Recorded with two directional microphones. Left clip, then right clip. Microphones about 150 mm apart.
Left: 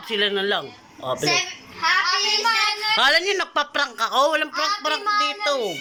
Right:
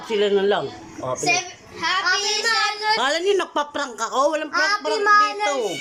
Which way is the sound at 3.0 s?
15° right (ahead or behind).